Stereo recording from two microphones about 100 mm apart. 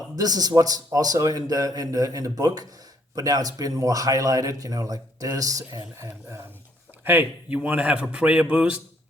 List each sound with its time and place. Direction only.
0.2 s a man's voice: 40° right (ahead or behind); by 8.8 s 15° right (ahead or behind)